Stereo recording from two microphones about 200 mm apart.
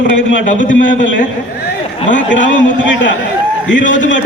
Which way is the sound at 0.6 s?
40° left (ahead or behind).